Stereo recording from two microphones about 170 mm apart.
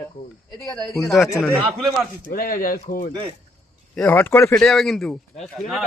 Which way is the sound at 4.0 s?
10° left (ahead or behind).